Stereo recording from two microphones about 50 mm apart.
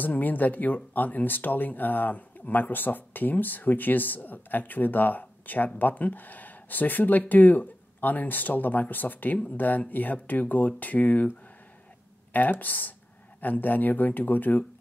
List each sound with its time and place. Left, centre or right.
0.0 s speech: left